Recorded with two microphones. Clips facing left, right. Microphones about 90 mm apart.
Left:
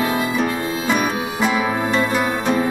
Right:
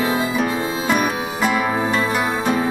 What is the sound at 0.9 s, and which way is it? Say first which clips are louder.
Music: even; centre (ahead or behind).